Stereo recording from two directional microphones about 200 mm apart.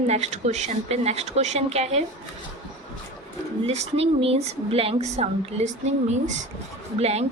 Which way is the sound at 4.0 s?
30° right (ahead or behind).